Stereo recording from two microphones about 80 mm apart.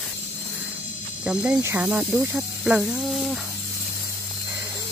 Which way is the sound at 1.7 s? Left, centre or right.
Centre.